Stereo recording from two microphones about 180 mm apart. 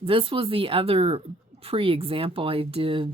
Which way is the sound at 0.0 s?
30° right (ahead or behind).